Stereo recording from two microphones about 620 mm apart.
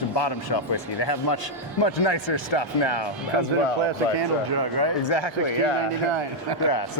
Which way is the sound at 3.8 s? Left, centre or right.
Right.